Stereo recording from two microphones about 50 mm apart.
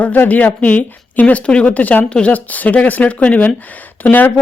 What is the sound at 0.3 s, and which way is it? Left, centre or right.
A woman's voice, left.